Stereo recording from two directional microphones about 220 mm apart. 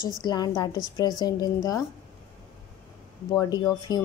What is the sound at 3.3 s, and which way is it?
Speech, 20° left (ahead or behind).